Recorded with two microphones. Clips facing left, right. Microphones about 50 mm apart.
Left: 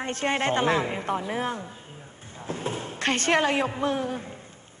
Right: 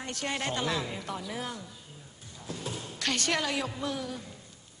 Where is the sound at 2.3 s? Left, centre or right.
Left.